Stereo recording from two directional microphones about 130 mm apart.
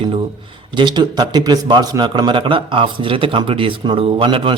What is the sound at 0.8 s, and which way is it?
A man's voice, 35° right (ahead or behind).